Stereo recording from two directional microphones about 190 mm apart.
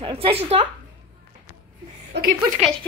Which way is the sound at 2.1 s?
65° right (ahead or behind).